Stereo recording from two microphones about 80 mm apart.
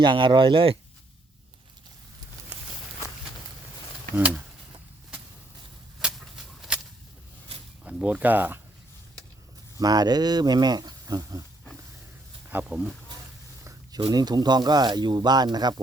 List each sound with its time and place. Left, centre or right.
0.0 s speech: right
4.1 s speech: centre
6.1 s a sound: centre
7.9 s speech: centre
9.7 s speech: right
12.6 s speech: centre
14.1 s speech: right